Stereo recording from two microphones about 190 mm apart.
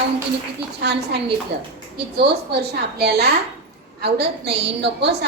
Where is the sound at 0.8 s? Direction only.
60° right (ahead or behind).